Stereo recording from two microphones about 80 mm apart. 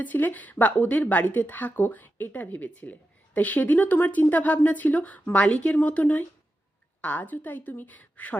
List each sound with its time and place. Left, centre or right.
0.0 s a woman's voice: left